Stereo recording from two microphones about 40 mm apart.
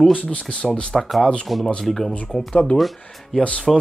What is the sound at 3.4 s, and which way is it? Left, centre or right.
Speech, left.